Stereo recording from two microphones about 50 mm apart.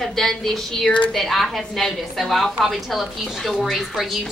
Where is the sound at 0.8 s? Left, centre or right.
Left.